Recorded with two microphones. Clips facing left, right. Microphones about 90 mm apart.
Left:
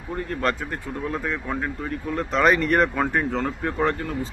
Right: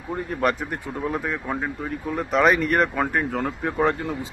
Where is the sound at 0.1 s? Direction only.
10° right (ahead or behind).